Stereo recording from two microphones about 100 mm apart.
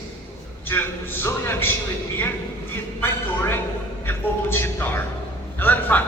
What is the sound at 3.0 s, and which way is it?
A man's voice, 20° left (ahead or behind).